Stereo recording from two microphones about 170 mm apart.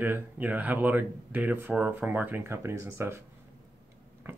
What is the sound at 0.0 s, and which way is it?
Speech, 10° right (ahead or behind).